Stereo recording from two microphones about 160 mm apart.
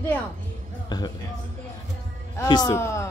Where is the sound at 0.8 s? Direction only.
25° left (ahead or behind).